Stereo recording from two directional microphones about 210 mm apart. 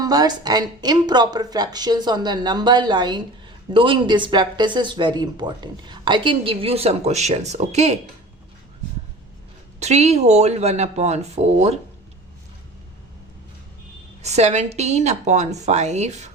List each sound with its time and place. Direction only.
0.0 s speech: 20° right (ahead or behind)
9.8 s a woman's voice: 30° right (ahead or behind)
14.2 s a woman's voice: 30° right (ahead or behind)